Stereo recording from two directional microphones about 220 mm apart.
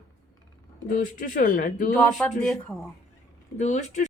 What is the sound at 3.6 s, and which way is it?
Child singing, 35° left (ahead or behind).